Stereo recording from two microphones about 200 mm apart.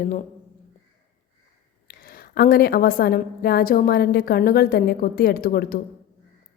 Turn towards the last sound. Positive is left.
turn(degrees=50)  # may be behind; listen again after turning